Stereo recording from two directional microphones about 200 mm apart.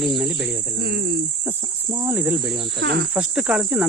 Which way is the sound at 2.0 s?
10° right (ahead or behind).